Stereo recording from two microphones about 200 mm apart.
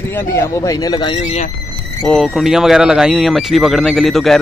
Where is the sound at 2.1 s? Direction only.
Centre (ahead or behind).